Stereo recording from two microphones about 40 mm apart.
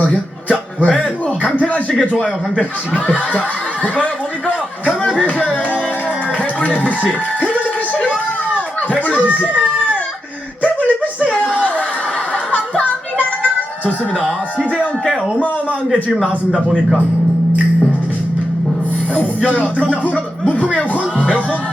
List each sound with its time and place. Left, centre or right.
0.0 s a man's voice: left
6.6 s speech: left
7.0 s speech: left
8.0 s a sound: left
10.6 s a sound: left
12.5 s music: left
19.4 s speech: left
20.5 s music: left